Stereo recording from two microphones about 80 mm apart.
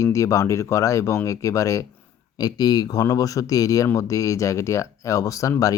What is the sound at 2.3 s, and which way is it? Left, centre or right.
Speech, left.